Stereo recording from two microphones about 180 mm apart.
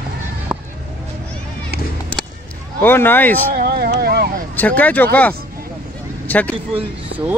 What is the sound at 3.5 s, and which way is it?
Speech, 55° right (ahead or behind).